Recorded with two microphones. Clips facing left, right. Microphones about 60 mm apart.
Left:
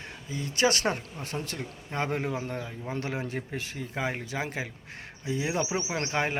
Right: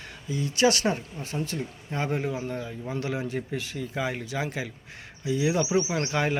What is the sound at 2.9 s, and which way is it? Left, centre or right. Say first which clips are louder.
Speech: right 3 dB; left.